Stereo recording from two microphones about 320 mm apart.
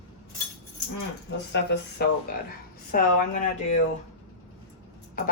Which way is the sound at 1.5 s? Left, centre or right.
Left.